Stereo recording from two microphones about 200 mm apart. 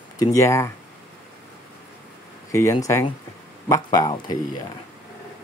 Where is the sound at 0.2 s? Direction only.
15° left (ahead or behind).